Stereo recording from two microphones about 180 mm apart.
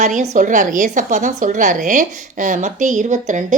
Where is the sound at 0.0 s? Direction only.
45° right (ahead or behind).